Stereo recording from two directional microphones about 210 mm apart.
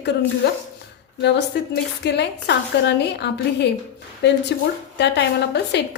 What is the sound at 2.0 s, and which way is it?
A woman's voice, 55° left (ahead or behind).